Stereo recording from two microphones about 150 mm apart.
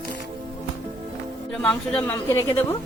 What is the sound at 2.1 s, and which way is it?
Speech, 20° left (ahead or behind).